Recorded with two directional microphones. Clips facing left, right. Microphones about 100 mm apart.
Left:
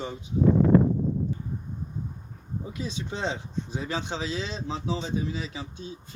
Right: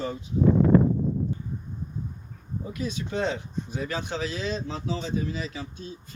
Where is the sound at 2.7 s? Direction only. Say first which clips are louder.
Right 4 dB; 25° left (ahead or behind).